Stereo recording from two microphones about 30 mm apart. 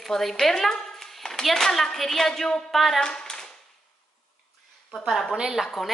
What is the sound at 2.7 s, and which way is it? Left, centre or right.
Speech, centre.